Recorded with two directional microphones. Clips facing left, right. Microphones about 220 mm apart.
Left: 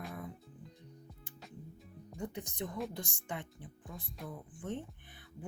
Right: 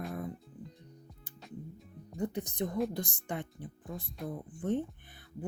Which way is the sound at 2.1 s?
35° right (ahead or behind).